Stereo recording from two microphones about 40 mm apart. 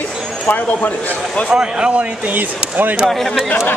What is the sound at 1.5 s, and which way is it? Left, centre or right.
Speech, right.